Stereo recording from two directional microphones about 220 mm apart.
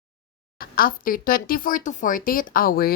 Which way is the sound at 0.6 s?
40° left (ahead or behind).